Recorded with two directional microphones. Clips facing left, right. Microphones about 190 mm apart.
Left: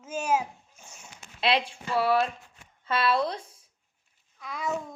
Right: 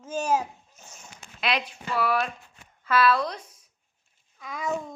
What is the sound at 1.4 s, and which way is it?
Speech, 30° left (ahead or behind).